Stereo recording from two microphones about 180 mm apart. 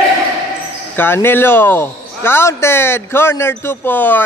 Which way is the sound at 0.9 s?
10° left (ahead or behind).